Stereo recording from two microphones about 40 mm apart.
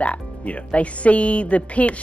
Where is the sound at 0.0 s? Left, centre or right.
Left.